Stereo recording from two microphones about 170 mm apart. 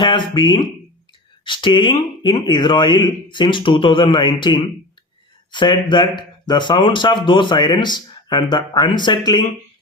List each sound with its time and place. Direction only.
0.0 s speech: 30° left (ahead or behind)